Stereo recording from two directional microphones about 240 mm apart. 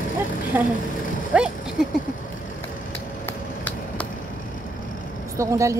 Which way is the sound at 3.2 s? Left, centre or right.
Centre.